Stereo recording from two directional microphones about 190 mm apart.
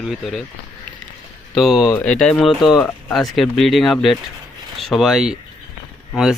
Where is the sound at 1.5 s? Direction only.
Centre (ahead or behind).